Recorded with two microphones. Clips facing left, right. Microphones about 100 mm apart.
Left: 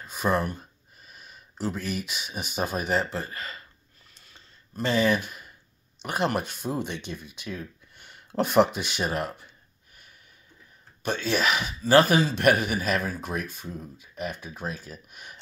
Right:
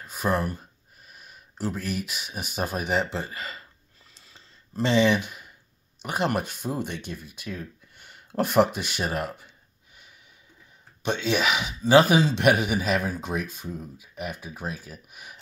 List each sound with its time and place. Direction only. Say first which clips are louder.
0.0 s speech: even; 5° right (ahead or behind)
3.0 s speech: right 2 dB; 25° right (ahead or behind)
4.3 s a sound: right 3 dB; 30° right (ahead or behind)
6.0 s speech: even; 10° right (ahead or behind)
8.0 s speech: even; 5° right (ahead or behind)
11.0 s speech: right 1 dB; 20° right (ahead or behind)